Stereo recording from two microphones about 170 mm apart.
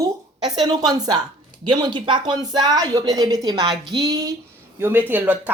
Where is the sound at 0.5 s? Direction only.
25° right (ahead or behind).